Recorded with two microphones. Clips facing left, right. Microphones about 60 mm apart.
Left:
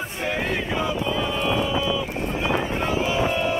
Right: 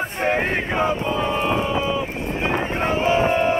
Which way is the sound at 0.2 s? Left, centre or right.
Right.